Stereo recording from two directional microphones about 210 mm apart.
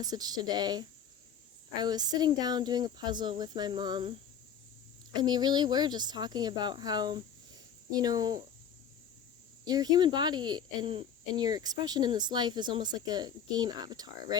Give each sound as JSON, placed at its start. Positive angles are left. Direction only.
{"t": 0.0, "sound": "speech", "side_deg": -20}
{"t": 5.1, "sound": "speech", "side_deg": -20}
{"t": 9.6, "sound": "speech", "side_deg": -20}